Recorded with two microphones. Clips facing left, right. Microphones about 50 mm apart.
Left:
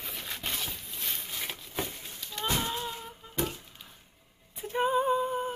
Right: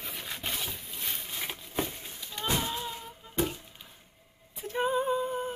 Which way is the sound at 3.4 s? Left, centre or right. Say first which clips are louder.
Right 2 dB; centre.